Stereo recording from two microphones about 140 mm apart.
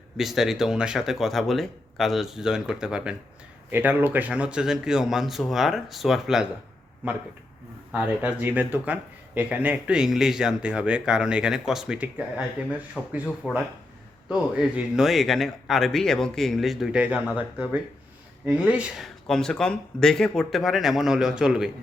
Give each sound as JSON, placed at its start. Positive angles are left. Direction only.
{"t": 0.2, "sound": "a man's voice", "side_deg": 0}
{"t": 7.9, "sound": "a man's voice", "side_deg": -10}